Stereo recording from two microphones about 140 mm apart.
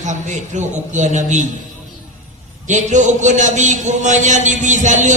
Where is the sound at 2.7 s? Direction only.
60° right (ahead or behind).